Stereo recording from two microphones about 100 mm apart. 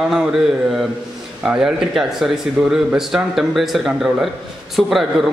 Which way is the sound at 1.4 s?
5° right (ahead or behind).